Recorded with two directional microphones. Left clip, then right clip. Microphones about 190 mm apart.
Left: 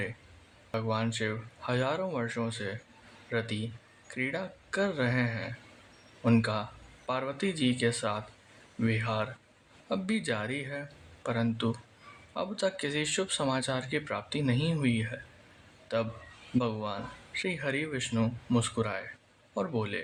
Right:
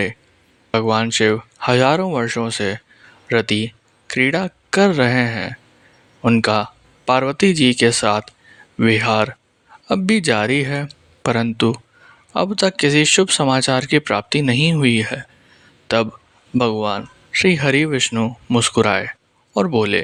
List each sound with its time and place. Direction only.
0.7 s speech: 50° right (ahead or behind)
18.1 s speech: 35° right (ahead or behind)